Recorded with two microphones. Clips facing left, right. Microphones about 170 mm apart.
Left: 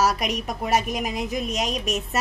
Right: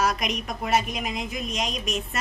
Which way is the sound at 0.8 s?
40° left (ahead or behind).